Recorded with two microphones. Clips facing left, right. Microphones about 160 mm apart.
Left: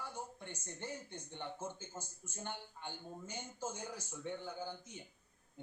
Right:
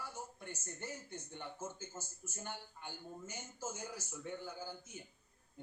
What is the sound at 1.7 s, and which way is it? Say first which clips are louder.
Speech: even; 15° left (ahead or behind).